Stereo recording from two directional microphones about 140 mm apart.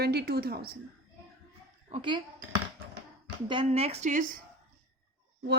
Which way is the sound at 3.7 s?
45° right (ahead or behind).